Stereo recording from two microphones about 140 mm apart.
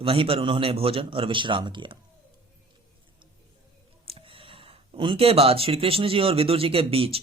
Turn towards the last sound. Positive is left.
turn(degrees=-40)  # may be behind; listen again after turning